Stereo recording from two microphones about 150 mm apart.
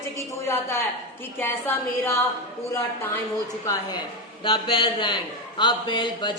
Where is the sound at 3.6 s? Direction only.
25° left (ahead or behind).